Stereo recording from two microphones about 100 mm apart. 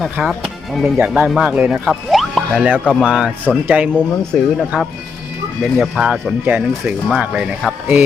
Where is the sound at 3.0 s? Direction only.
5° right (ahead or behind).